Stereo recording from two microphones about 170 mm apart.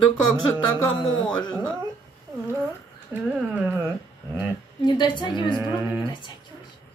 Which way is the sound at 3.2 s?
10° right (ahead or behind).